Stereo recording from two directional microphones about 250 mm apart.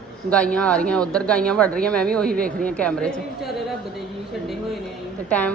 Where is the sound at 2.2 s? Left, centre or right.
Right.